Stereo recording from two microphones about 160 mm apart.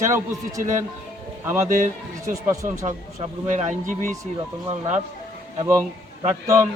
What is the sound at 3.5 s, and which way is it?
Speech, 50° right (ahead or behind).